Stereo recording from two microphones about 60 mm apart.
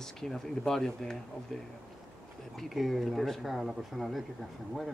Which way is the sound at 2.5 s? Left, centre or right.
Centre.